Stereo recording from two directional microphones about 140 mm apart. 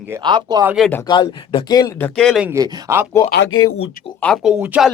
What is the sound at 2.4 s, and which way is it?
Speech, 20° right (ahead or behind).